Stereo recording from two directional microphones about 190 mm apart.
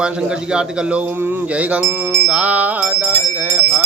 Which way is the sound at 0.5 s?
5° right (ahead or behind).